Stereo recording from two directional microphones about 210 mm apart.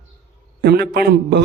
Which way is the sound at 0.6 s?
50° right (ahead or behind).